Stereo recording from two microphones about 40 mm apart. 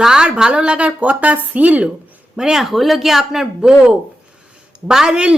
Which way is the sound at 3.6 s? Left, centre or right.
Right.